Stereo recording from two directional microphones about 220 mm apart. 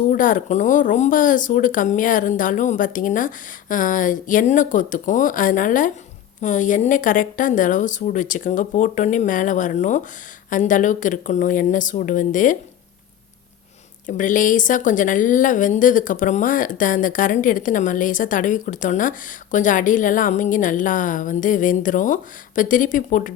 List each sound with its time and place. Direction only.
0.1 s a woman's voice: 35° left (ahead or behind)
14.1 s a woman's voice: 35° left (ahead or behind)